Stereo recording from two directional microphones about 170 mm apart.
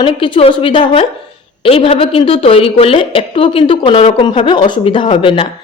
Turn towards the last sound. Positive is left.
turn(degrees=30)  # may be behind; listen again after turning